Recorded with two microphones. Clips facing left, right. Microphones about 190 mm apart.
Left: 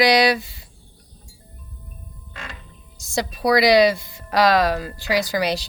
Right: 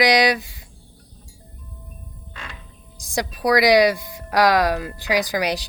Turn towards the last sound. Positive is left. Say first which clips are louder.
# even
turn(degrees=-15)  # may be behind; listen again after turning